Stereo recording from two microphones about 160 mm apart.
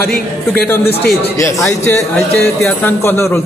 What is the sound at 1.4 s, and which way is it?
A man's voice, 20° left (ahead or behind).